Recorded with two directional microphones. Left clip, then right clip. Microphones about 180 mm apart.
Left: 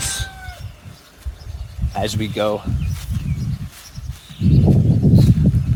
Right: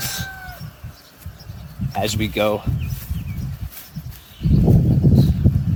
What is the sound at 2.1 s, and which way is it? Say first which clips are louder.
Speech: right 1 dB; 15° right (ahead or behind).